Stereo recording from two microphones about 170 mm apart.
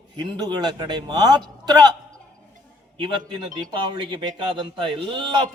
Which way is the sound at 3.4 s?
25° right (ahead or behind).